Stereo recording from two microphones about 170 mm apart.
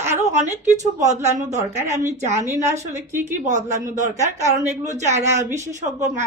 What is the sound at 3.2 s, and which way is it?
Speech, 45° right (ahead or behind).